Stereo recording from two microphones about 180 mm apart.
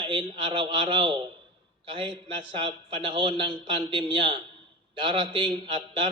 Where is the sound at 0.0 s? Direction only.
25° right (ahead or behind).